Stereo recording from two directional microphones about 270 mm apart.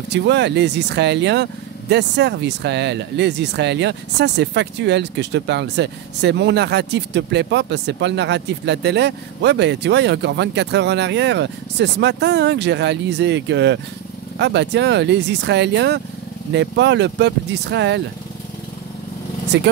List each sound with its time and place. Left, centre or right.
0.1 s speech: right
19.5 s speech: right